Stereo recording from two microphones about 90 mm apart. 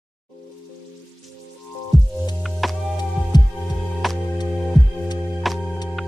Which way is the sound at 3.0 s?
50° left (ahead or behind).